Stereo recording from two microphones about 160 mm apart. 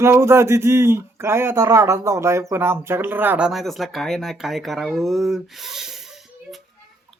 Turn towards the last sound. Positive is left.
turn(degrees=0)  # may be behind; listen again after turning